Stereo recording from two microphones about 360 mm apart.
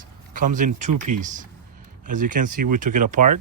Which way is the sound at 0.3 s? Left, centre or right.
Right.